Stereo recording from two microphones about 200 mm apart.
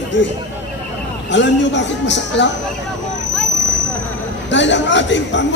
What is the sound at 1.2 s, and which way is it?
Speech, 65° left (ahead or behind).